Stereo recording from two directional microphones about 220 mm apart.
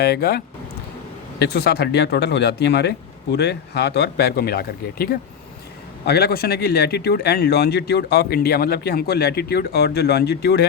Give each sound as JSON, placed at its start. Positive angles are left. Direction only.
{"t": 0.0, "sound": "speech", "side_deg": 50}